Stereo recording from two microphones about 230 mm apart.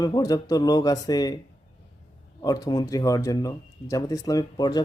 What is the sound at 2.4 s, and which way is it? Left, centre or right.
Speech, centre.